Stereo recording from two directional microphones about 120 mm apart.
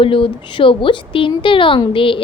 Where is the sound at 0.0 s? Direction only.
45° left (ahead or behind).